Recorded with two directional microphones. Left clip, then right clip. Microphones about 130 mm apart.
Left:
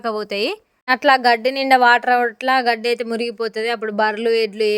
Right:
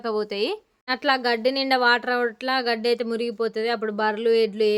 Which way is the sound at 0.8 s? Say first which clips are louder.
Left 8 dB; 50° left (ahead or behind).